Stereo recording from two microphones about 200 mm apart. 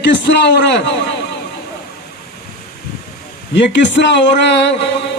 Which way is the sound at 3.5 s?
60° left (ahead or behind).